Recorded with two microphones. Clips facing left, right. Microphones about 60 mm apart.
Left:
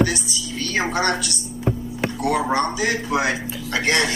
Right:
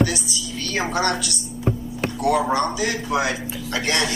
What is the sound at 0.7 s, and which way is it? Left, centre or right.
Speech, left.